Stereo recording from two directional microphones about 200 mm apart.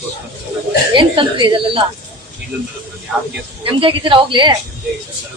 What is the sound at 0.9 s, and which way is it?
Speech, 25° right (ahead or behind).